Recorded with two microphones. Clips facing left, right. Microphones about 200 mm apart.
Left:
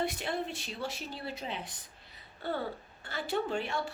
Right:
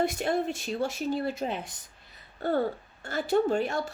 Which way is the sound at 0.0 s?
45° right (ahead or behind).